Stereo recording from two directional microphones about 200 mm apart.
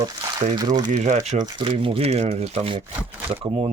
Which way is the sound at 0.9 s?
35° right (ahead or behind).